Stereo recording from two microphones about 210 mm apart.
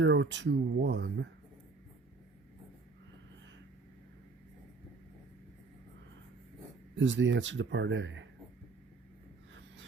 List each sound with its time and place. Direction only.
0.0 s speech: 60° right (ahead or behind)
6.9 s speech: 60° right (ahead or behind)